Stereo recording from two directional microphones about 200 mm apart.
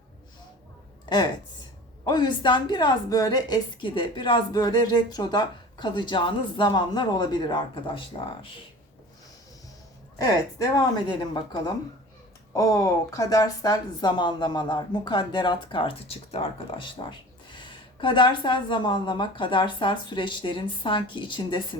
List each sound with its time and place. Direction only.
2.0 s speech: 20° left (ahead or behind)
10.2 s speech: 20° left (ahead or behind)